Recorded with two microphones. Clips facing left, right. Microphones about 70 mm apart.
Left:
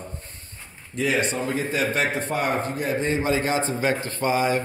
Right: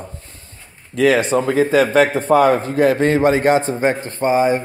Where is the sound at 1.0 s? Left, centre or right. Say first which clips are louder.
Right 9 dB; right.